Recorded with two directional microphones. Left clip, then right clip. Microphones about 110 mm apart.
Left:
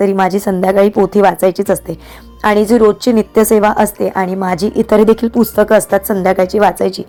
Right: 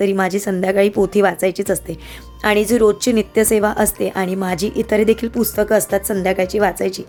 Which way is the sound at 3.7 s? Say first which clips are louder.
Left 5 dB; 35° right (ahead or behind).